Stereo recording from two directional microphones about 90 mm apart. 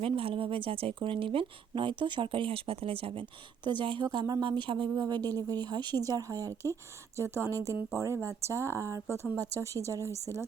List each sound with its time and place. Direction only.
0.0 s speech: 90° right
3.6 s speech: 60° right (ahead or behind)
4.1 s speech: 55° right (ahead or behind); by 10.1 s 35° right (ahead or behind)